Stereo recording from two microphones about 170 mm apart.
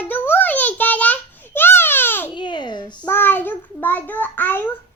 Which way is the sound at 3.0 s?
10° left (ahead or behind).